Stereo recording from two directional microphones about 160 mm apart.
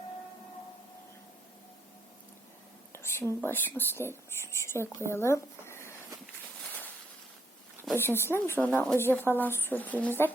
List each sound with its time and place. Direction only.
2.9 s whispering: 15° left (ahead or behind)
3.4 s a woman's voice: 10° left (ahead or behind)
7.9 s a woman's voice: 15° left (ahead or behind)